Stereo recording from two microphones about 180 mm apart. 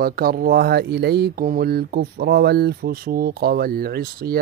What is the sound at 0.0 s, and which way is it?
Mantra, 55° right (ahead or behind).